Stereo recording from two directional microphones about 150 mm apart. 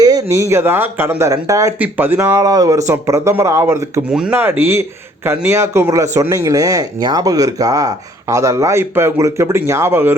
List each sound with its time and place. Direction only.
0.0 s speech: 25° right (ahead or behind)
2.3 s speech: 25° right (ahead or behind)
4.1 s speech: 5° right (ahead or behind)